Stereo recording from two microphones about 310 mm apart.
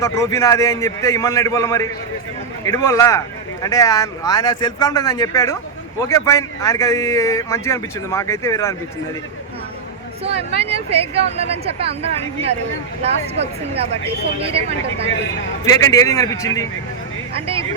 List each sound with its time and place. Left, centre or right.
0.0 s speech: centre
10.2 s speech: centre
15.6 s speech: centre
17.3 s speech: centre